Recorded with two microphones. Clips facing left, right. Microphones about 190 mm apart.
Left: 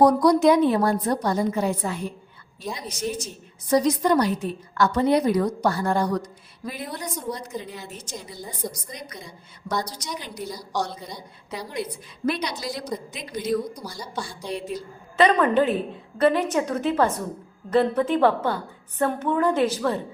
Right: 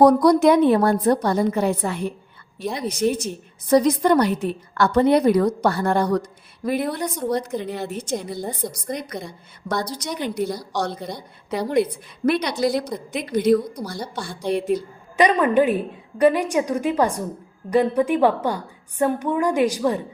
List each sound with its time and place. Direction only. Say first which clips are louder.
0.0 s a woman's voice: right 3 dB; 60° right (ahead or behind)
15.1 s a woman's voice: right 2 dB; 15° right (ahead or behind)